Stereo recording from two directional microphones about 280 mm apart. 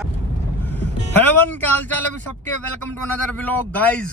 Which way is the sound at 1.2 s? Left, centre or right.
Centre.